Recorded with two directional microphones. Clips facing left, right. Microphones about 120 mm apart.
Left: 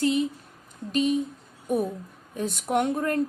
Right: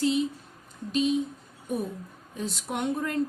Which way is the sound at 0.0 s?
50° left (ahead or behind).